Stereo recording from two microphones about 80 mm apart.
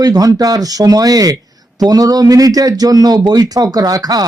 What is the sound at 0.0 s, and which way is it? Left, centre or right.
Speech, right.